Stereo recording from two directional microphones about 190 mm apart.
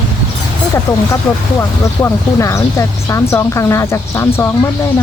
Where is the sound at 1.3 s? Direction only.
5° left (ahead or behind).